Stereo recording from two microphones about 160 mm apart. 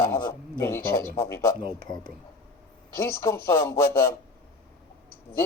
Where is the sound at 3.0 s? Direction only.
15° left (ahead or behind).